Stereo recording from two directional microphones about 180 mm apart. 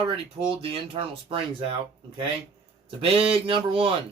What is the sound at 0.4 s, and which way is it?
Speech, 30° right (ahead or behind).